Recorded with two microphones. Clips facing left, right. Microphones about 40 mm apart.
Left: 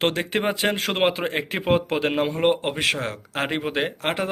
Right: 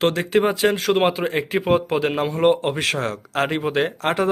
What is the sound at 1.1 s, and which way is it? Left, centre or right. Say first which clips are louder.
A man's voice: right 4 dB; left.